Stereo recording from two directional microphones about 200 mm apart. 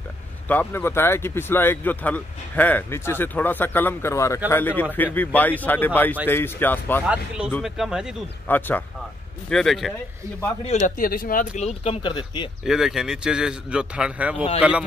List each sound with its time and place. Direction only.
0.5 s speech: 10° left (ahead or behind)
7.1 s a man's voice: 5° right (ahead or behind)
8.5 s a man's voice: 10° left (ahead or behind)
10.6 s speech: 35° left (ahead or behind)
12.6 s a man's voice: centre (ahead or behind)